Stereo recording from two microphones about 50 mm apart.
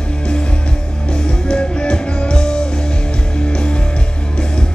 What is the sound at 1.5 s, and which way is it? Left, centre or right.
Music, centre.